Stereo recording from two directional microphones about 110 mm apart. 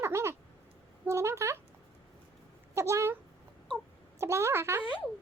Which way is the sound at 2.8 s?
25° right (ahead or behind).